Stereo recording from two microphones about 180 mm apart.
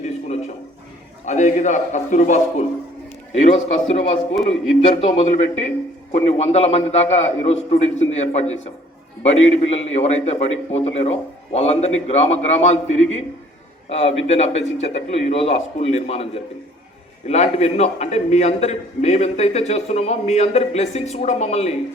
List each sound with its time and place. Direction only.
0.0 s a sound: 40° left (ahead or behind)
1.2 s a man's voice: 40° left (ahead or behind)
4.4 s speech: centre (ahead or behind)
4.8 s a man's voice: 35° left (ahead or behind)